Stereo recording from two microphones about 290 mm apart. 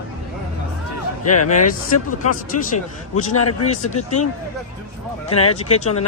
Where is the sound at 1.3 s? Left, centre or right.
Left.